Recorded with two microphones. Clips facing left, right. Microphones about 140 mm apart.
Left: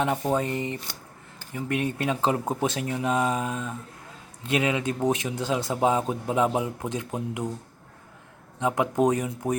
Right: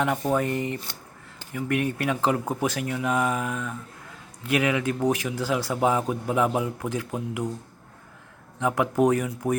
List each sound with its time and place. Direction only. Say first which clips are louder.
0.2 s a man's voice: right 1 dB; 20° left (ahead or behind)
8.5 s a man's voice: right 1 dB; 20° left (ahead or behind)